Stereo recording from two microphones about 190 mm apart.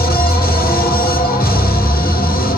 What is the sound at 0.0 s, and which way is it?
Music, 50° left (ahead or behind).